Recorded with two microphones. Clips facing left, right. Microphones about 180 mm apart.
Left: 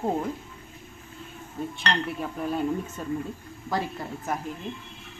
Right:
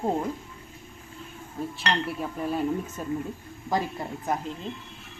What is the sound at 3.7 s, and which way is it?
Speech, 20° right (ahead or behind).